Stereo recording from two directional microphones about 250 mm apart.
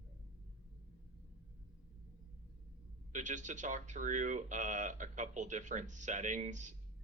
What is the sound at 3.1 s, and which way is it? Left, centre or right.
Speech, right.